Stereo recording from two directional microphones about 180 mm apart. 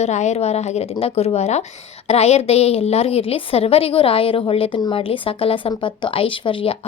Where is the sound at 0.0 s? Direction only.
40° left (ahead or behind).